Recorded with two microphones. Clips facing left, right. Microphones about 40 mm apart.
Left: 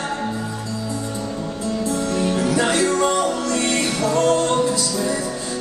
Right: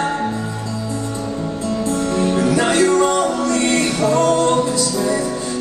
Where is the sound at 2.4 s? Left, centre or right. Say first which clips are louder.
Right 4 dB; centre.